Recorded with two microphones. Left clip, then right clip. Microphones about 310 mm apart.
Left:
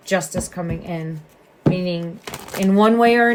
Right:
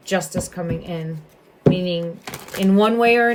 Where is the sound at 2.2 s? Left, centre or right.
Centre.